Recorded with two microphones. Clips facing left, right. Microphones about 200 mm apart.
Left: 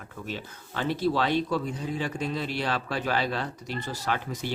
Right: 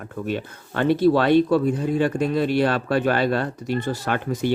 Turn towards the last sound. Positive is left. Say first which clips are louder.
# right 7 dB
turn(degrees=-55)  # may be behind; listen again after turning